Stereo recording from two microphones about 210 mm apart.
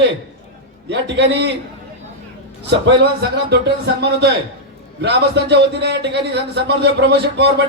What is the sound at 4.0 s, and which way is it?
A man's voice, 50° right (ahead or behind).